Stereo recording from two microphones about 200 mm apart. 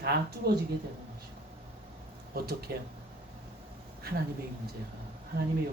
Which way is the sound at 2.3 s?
50° right (ahead or behind).